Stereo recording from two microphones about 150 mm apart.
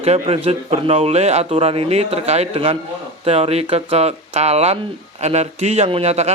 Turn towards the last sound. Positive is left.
turn(degrees=-45)  # may be behind; listen again after turning